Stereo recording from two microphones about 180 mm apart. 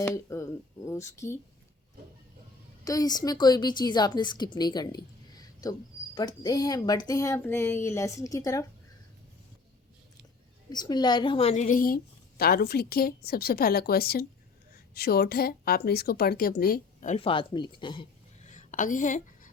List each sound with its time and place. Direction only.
0.0 s speech: 15° left (ahead or behind)
2.8 s speech: 20° left (ahead or behind)
4.5 s a sound: 25° left (ahead or behind)
6.1 s speech: 20° left (ahead or behind)
10.7 s a woman's voice: 25° left (ahead or behind); by 17.2 s 50° left (ahead or behind)
17.2 s speech: 30° left (ahead or behind)
18.4 s a sound: 45° left (ahead or behind)